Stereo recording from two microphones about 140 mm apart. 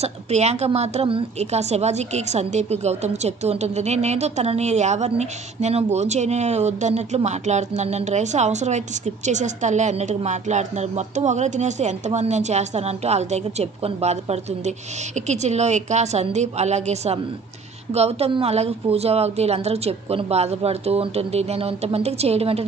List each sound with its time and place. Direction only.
0.0 s a woman's voice: 50° right (ahead or behind)